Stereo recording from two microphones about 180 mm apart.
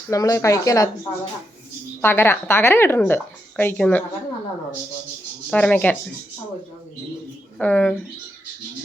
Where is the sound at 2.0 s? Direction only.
15° left (ahead or behind).